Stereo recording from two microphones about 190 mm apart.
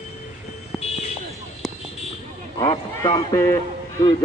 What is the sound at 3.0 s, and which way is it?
Speech, 20° left (ahead or behind).